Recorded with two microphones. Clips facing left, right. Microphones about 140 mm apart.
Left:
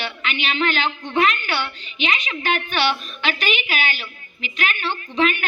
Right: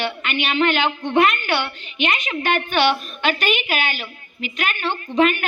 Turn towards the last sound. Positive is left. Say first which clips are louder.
# right 3 dB
turn(degrees=-50)  # may be behind; listen again after turning